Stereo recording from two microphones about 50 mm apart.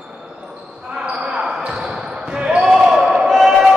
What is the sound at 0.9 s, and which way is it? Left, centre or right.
Basketball bounce, centre.